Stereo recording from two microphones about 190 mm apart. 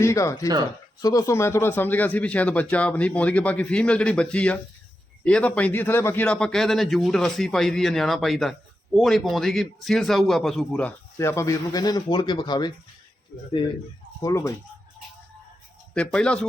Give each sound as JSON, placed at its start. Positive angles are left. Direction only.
{"t": 0.0, "sound": "a man's voice", "side_deg": 15}
{"t": 14.2, "sound": "speech", "side_deg": 15}
{"t": 16.0, "sound": "a man's voice", "side_deg": 5}